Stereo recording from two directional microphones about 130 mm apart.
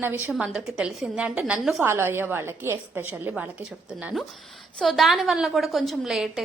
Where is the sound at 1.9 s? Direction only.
20° right (ahead or behind).